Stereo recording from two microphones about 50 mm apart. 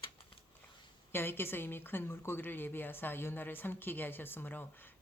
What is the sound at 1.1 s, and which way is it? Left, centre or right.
A woman's voice, left.